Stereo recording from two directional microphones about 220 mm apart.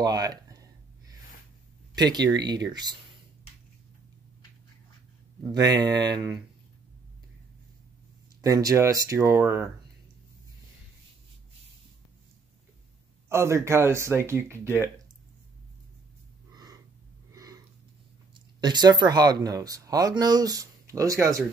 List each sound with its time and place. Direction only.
0.0 s a sound: 15° right (ahead or behind)
2.0 s speech: 20° right (ahead or behind)
5.5 s speech: 20° right (ahead or behind)
8.4 s speech: 15° right (ahead or behind)
13.3 s speech: 10° right (ahead or behind)
16.5 s a sound: 15° right (ahead or behind)
18.3 s speech: 20° right (ahead or behind)